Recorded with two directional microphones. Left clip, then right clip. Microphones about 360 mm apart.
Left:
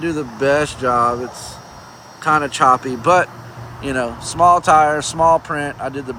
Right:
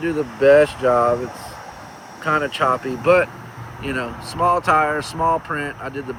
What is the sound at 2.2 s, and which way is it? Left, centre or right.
Speech, centre.